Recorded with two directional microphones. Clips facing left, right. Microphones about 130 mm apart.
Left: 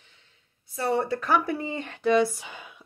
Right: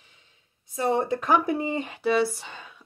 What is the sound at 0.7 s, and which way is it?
Speech, 20° right (ahead or behind).